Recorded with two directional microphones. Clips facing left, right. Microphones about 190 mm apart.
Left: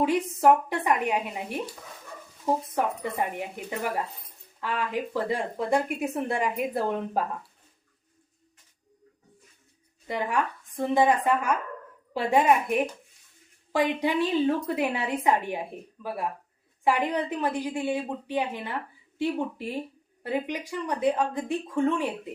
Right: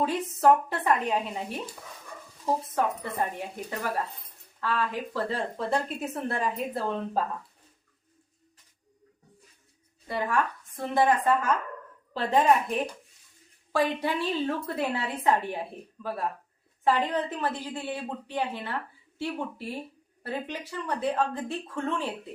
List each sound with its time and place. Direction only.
0.0 s a woman's voice: 15° left (ahead or behind)
2.7 s a woman's voice: 15° left (ahead or behind)
10.1 s a woman's voice: 15° left (ahead or behind)